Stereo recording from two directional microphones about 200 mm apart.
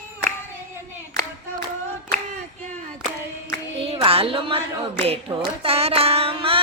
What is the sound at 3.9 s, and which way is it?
Music, 30° right (ahead or behind).